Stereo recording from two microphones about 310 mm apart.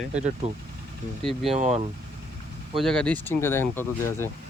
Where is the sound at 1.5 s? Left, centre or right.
Right.